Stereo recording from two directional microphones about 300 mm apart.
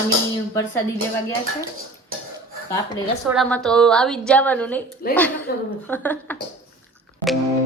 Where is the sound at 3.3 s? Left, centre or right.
Centre.